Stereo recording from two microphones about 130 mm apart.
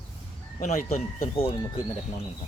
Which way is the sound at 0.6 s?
65° left (ahead or behind).